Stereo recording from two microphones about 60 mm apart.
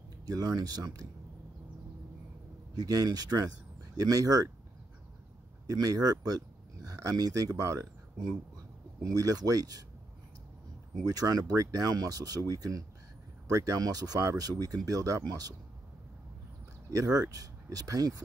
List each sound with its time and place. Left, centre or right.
0.3 s speech: right
2.7 s speech: right
5.7 s speech: right
9.0 s speech: right
11.1 s speech: right
13.5 s speech: right
14.9 s speech: right
15.2 s speech: right
16.9 s speech: right